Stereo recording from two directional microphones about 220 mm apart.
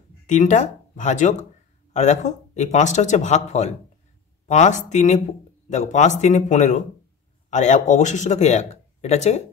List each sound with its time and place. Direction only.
0.3 s speech: 35° left (ahead or behind)